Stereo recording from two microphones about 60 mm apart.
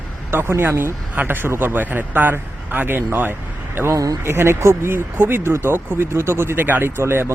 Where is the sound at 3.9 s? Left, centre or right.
Right.